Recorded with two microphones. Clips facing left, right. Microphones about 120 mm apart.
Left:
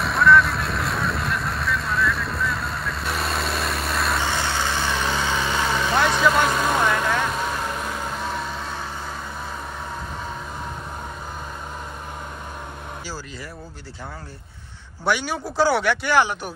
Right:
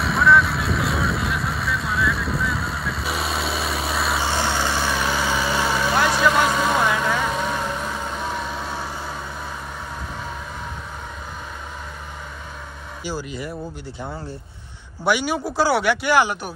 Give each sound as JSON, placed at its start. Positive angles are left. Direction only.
{"t": 0.0, "sound": "vehicle", "side_deg": 0}
{"t": 4.3, "sound": "vehicle", "side_deg": -15}
{"t": 13.0, "sound": "speech", "side_deg": -20}
{"t": 15.0, "sound": "speech", "side_deg": -10}